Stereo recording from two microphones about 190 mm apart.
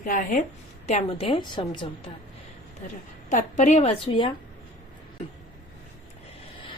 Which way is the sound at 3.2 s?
40° left (ahead or behind).